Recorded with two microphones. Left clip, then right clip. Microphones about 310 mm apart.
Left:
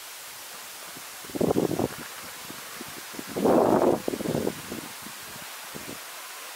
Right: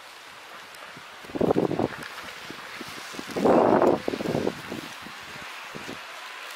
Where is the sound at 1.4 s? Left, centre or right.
Left.